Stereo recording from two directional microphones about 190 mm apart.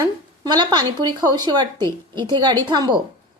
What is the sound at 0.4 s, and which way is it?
A woman's voice, 20° right (ahead or behind).